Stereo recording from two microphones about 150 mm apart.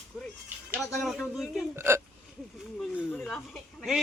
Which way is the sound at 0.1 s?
Centre (ahead or behind).